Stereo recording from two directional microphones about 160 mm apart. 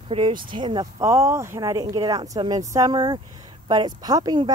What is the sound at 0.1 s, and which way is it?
Speech, 30° right (ahead or behind).